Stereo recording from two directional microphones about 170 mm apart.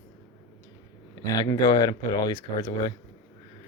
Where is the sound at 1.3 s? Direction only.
20° left (ahead or behind).